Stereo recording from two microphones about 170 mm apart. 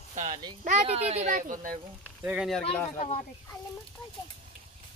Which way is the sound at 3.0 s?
35° left (ahead or behind).